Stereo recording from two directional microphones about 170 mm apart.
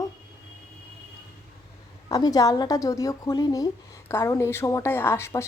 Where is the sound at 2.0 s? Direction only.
20° left (ahead or behind).